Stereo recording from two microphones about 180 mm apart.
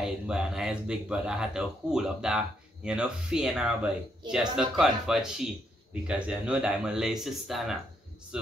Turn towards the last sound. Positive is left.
turn(degrees=0)  # may be behind; listen again after turning